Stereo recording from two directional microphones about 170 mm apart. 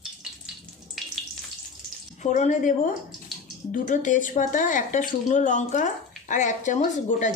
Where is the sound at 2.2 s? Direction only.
45° left (ahead or behind).